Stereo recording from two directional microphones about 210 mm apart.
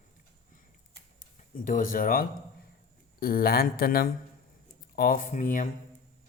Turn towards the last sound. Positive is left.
turn(degrees=35)  # may be behind; listen again after turning